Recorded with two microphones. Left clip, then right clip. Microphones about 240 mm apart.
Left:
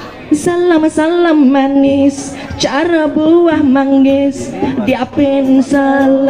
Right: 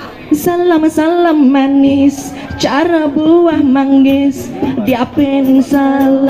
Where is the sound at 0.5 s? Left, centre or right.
Right.